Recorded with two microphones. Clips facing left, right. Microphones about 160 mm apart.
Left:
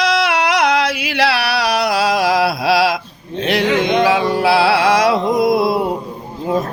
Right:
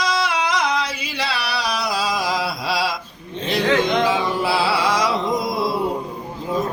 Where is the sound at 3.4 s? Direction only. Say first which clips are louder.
Left 3 dB; 75° left (ahead or behind).